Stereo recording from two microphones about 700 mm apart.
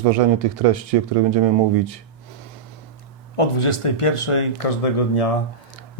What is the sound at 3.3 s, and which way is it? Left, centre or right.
Speech, left.